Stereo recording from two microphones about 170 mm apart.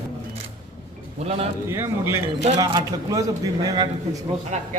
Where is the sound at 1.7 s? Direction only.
15° right (ahead or behind).